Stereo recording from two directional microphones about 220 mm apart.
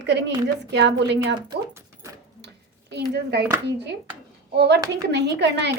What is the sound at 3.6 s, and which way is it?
A woman's voice, 50° right (ahead or behind).